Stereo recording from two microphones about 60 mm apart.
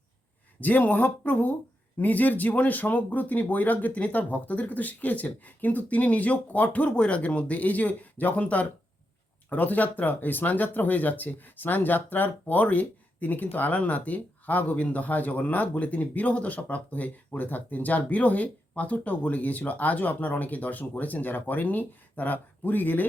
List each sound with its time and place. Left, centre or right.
0.6 s speech: left